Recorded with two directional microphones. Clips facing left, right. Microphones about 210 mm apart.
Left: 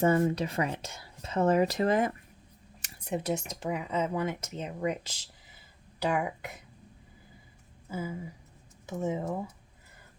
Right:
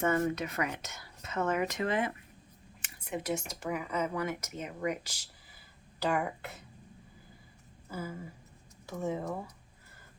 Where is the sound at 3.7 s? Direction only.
25° left (ahead or behind).